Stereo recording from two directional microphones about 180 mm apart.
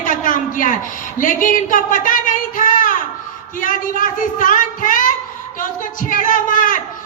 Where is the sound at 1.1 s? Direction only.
50° left (ahead or behind).